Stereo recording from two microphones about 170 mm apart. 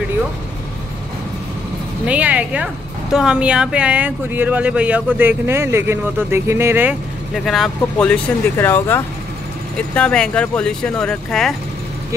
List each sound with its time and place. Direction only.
2.0 s a woman's voice: 10° right (ahead or behind)
7.3 s speech: centre (ahead or behind)